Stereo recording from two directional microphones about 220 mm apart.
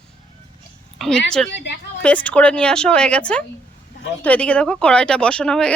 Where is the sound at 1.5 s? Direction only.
50° left (ahead or behind).